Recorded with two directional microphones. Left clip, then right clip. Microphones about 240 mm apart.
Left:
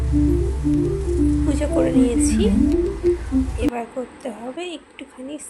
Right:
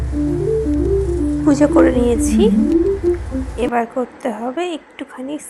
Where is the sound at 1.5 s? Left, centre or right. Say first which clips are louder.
Right 9 dB; right.